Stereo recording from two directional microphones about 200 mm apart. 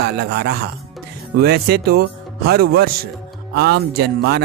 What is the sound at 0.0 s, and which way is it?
Speech, 55° right (ahead or behind).